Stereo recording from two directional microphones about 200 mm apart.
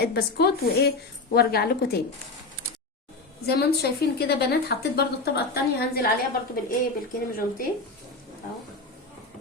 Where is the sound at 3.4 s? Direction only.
55° left (ahead or behind).